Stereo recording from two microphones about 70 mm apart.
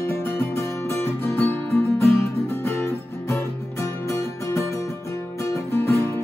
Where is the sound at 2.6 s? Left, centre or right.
Left.